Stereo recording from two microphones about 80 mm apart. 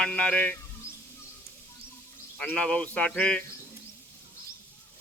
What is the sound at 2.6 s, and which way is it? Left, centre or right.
Speech, centre.